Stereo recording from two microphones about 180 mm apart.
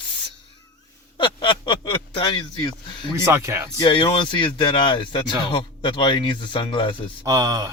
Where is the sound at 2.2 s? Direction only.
25° left (ahead or behind).